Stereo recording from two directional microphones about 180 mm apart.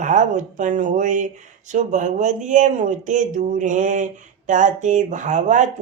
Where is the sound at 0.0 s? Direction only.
45° right (ahead or behind).